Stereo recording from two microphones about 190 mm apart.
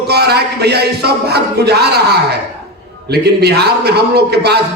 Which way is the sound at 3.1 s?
60° right (ahead or behind).